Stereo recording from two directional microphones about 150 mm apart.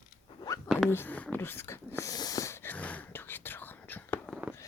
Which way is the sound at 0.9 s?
15° left (ahead or behind).